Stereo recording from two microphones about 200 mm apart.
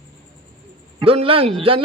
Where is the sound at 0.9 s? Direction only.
25° right (ahead or behind).